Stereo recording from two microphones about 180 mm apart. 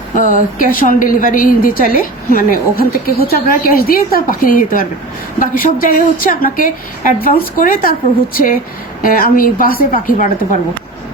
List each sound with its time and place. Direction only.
0.2 s a woman's voice: 50° left (ahead or behind)